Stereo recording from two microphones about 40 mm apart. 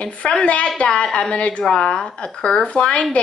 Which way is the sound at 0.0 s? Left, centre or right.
Left.